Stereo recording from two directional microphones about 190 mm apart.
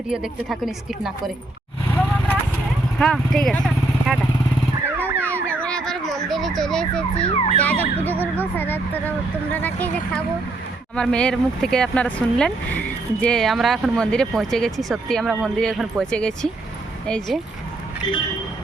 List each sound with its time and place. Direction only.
0.1 s speech: centre (ahead or behind)
3.0 s speech: 5° left (ahead or behind)
4.9 s emergency vehicle: 10° right (ahead or behind)
5.2 s emergency vehicle: 10° left (ahead or behind)
7.3 s ambulance: 30° left (ahead or behind)
7.6 s speech: 10° left (ahead or behind)